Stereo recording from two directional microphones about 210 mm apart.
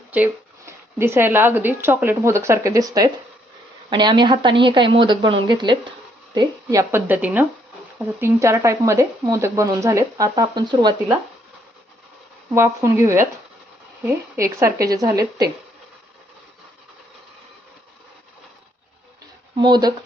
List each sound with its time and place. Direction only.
0.1 s speech: 10° right (ahead or behind)
12.5 s speech: 10° right (ahead or behind)
19.5 s speech: 20° right (ahead or behind)